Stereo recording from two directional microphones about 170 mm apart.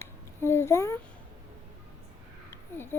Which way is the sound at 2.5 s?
15° left (ahead or behind).